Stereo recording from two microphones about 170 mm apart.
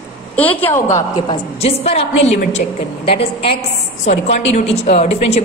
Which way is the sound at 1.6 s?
35° left (ahead or behind).